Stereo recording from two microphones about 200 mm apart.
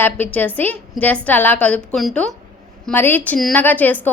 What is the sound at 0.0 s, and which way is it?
A woman's voice, 10° left (ahead or behind).